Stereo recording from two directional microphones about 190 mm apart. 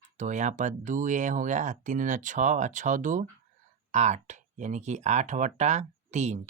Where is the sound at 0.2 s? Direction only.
40° right (ahead or behind).